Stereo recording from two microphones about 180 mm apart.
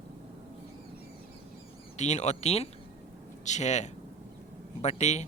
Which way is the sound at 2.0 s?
40° left (ahead or behind).